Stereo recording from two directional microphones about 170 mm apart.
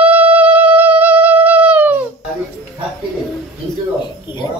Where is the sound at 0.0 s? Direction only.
10° right (ahead or behind).